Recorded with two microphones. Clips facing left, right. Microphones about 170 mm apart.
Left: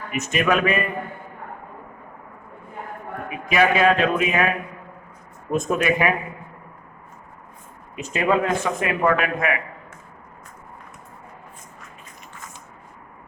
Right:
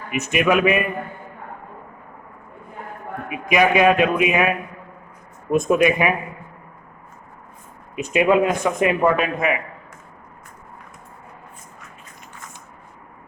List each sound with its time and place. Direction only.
0.2 s speech: 10° right (ahead or behind)
3.2 s a man's voice: 15° right (ahead or behind)
5.5 s speech: 15° right (ahead or behind)
7.9 s a man's voice: 15° right (ahead or behind)